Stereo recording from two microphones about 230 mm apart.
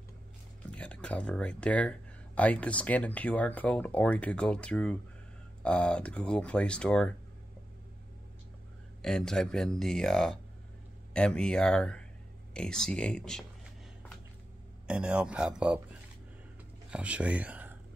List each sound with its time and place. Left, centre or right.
0.7 s speech: centre
9.0 s speech: centre
14.9 s speech: centre
16.9 s speech: centre